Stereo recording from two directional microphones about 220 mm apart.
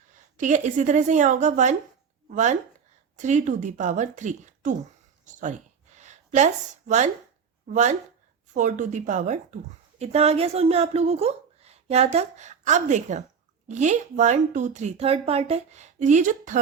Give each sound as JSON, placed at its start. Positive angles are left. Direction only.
{"t": 0.3, "sound": "speech", "side_deg": -35}
{"t": 5.2, "sound": "a sound", "side_deg": -35}
{"t": 7.7, "sound": "a woman's voice", "side_deg": -35}